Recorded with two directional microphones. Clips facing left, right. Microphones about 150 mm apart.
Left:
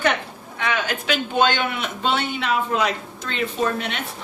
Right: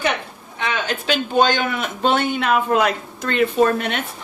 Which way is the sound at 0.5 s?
30° right (ahead or behind).